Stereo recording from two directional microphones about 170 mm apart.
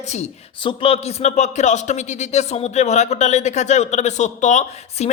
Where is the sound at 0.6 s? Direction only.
30° left (ahead or behind).